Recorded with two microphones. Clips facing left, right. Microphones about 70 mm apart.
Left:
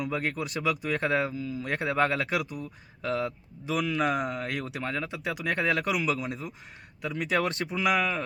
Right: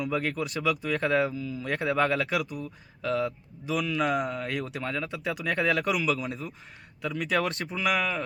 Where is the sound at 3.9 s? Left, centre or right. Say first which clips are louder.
Right 1 dB; left.